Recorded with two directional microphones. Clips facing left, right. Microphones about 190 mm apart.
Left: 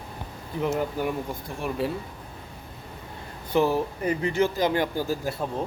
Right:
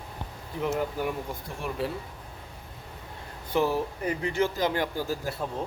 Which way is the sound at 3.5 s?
20° left (ahead or behind).